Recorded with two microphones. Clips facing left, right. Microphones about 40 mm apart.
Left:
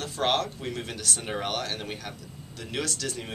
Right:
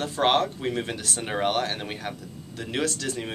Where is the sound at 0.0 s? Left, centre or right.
Centre.